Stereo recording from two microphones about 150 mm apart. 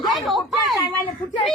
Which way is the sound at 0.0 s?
Centre (ahead or behind).